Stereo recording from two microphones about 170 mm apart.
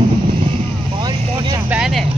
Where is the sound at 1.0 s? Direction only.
25° right (ahead or behind).